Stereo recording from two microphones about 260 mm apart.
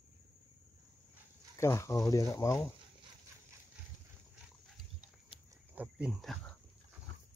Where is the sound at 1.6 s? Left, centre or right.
Centre.